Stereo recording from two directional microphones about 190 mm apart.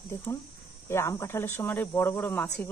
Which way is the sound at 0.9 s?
15° left (ahead or behind).